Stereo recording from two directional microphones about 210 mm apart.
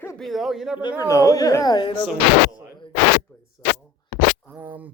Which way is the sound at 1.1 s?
15° left (ahead or behind).